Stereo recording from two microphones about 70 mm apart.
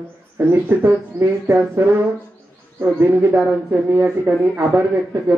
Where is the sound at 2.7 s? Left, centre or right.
Right.